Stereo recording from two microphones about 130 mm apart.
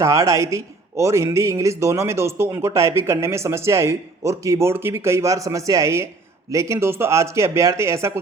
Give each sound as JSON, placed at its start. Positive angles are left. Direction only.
{"t": 0.0, "sound": "speech", "side_deg": -25}